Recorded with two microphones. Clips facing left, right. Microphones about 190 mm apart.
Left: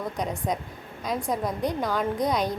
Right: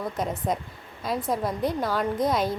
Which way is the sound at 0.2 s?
Centre (ahead or behind).